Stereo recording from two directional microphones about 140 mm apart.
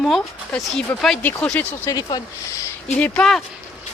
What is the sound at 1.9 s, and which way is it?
Speech, 25° left (ahead or behind).